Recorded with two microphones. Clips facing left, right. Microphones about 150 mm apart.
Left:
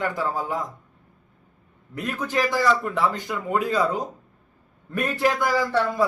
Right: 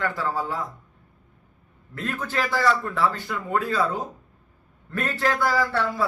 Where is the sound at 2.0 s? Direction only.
15° left (ahead or behind).